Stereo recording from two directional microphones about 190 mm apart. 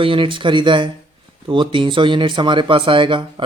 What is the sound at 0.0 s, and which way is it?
Speech, 25° right (ahead or behind).